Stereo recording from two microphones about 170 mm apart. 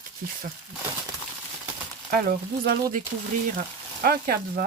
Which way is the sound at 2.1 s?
60° right (ahead or behind).